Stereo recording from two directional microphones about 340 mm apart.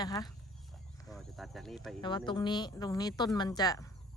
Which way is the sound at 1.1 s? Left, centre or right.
Centre.